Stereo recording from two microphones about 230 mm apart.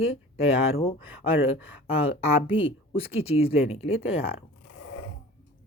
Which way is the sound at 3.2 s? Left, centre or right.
Left.